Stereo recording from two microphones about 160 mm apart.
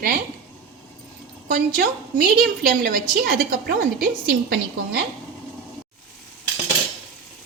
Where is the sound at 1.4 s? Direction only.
65° right (ahead or behind).